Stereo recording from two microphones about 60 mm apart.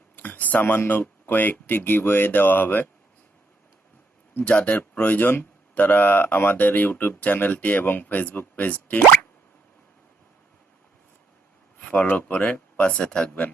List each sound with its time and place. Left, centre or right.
0.2 s speech: left
4.4 s speech: left
11.8 s speech: left